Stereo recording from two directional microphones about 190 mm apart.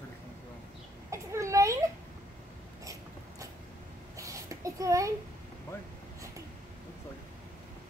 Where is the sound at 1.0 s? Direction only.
15° right (ahead or behind).